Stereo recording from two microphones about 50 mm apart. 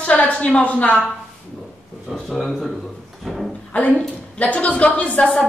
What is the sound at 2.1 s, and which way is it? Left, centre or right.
Speech, centre.